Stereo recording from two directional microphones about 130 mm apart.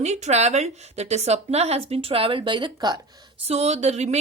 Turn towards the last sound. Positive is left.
turn(degrees=-55)  # may be behind; listen again after turning